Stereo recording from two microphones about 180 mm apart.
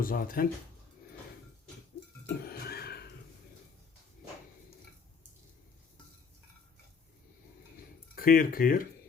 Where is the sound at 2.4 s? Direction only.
60° left (ahead or behind).